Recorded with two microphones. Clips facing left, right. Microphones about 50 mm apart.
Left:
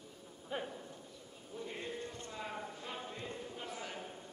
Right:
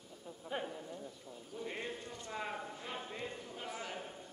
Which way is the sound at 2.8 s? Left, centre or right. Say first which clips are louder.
Right 1 dB; centre.